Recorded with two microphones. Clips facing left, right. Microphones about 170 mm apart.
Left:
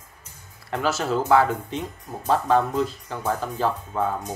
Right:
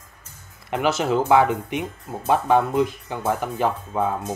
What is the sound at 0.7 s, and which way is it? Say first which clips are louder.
Speech: right 3 dB; 20° right (ahead or behind).